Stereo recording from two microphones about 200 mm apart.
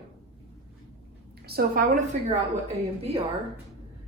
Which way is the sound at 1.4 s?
50° right (ahead or behind).